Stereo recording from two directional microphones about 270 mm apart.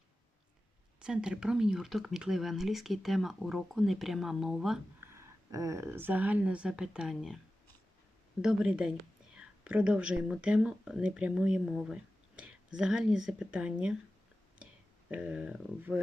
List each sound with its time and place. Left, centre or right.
1.0 s speech: centre
8.4 s speech: centre
15.1 s speech: centre